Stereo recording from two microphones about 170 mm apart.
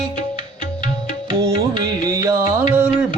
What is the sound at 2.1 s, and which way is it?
Music, 20° right (ahead or behind).